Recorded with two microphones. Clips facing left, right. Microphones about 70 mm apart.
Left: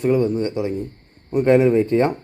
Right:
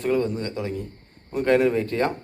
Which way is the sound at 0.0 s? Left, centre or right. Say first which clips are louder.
Left 5 dB; centre.